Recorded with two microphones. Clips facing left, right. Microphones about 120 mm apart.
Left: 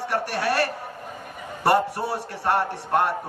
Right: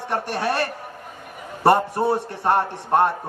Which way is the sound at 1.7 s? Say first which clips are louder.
Right 4 dB; 25° right (ahead or behind).